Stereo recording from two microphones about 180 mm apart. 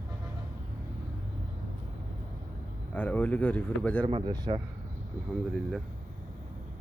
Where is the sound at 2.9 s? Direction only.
10° left (ahead or behind).